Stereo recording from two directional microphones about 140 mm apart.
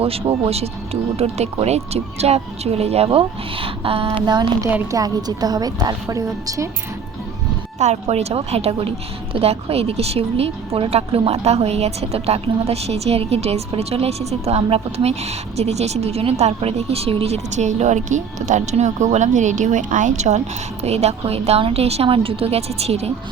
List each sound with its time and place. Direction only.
0.0 s a woman's voice: 45° right (ahead or behind)
4.3 s a woman's voice: 30° right (ahead or behind)
7.8 s a woman's voice: 50° right (ahead or behind)